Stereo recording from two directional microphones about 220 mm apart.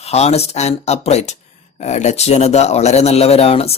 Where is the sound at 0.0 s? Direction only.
30° left (ahead or behind).